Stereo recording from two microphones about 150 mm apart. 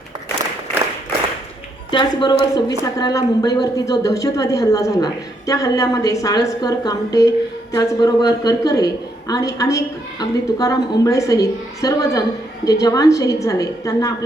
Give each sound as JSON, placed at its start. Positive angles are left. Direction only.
{"t": 1.9, "sound": "speech", "side_deg": 30}